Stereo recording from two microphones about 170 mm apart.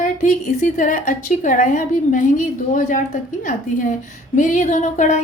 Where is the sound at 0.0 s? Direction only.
45° left (ahead or behind).